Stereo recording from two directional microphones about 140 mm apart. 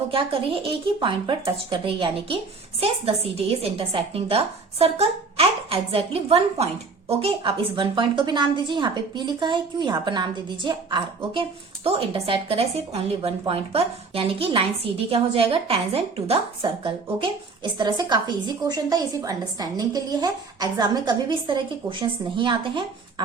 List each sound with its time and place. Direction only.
0.1 s a woman's voice: 40° right (ahead or behind)